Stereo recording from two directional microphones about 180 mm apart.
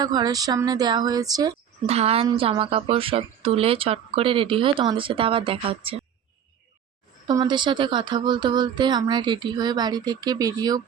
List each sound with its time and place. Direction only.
0.0 s speech: 20° right (ahead or behind)
1.9 s speech: 35° right (ahead or behind)
7.3 s speech: 25° right (ahead or behind)